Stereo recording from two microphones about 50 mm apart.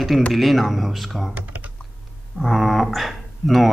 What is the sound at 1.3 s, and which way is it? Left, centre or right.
Typing, right.